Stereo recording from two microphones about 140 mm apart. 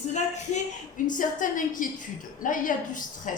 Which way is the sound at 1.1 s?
75° left (ahead or behind).